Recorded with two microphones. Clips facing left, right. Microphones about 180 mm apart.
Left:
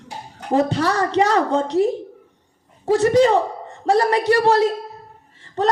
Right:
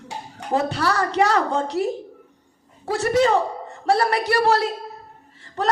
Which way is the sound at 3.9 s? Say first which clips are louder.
Left 3 dB; 35° left (ahead or behind).